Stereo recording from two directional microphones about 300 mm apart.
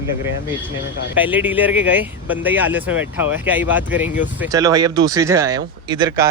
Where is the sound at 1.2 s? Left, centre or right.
Centre.